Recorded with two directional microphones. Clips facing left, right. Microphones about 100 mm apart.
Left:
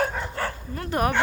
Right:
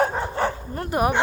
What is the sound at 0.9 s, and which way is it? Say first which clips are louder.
Speech: right 2 dB; 15° right (ahead or behind).